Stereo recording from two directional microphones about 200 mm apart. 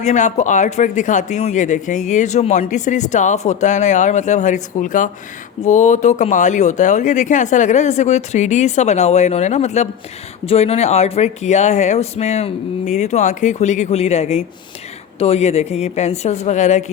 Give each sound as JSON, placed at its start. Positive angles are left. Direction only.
{"t": 0.0, "sound": "speech", "side_deg": 35}